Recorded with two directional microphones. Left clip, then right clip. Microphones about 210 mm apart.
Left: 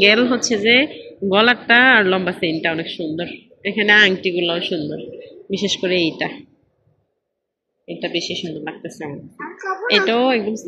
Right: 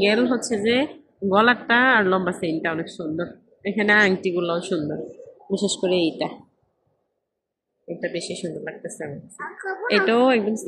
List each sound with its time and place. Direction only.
0.0 s a woman's voice: centre (ahead or behind)
7.8 s speech: 5° right (ahead or behind)